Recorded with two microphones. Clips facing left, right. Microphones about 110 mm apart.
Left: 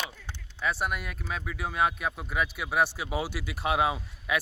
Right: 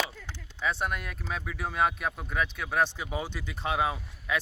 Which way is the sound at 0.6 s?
5° left (ahead or behind).